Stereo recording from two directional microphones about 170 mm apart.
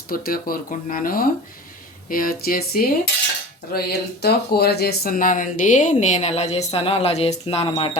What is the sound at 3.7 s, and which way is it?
Speech, 70° left (ahead or behind).